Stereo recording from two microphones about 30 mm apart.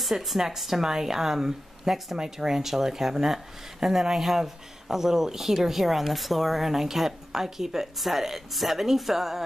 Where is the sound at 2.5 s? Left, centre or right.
Centre.